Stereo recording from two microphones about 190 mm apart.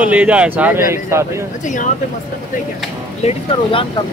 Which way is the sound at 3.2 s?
35° left (ahead or behind).